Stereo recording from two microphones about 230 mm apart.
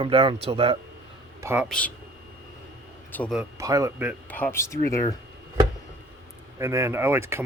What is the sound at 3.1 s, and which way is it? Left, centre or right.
Speech, centre.